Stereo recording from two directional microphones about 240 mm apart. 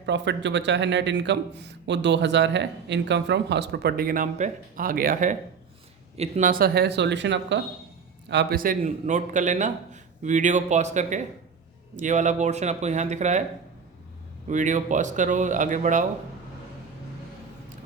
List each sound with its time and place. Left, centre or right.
0.0 s a man's voice: right
14.4 s a man's voice: right